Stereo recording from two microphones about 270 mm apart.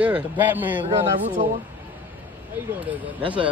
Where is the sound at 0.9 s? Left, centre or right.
Right.